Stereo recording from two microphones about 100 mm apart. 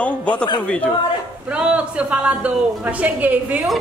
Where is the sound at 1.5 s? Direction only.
10° right (ahead or behind).